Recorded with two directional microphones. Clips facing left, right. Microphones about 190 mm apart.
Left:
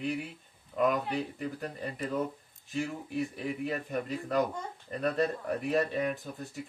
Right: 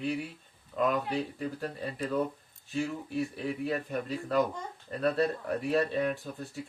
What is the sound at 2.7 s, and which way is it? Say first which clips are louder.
Speech: right 1 dB; 15° left (ahead or behind).